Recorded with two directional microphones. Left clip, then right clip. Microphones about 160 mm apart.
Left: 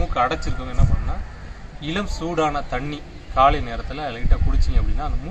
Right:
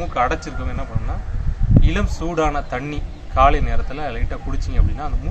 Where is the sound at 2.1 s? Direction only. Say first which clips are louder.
Right 1 dB; 15° right (ahead or behind).